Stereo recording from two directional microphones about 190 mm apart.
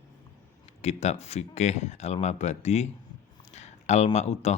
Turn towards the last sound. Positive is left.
turn(degrees=35)  # may be behind; listen again after turning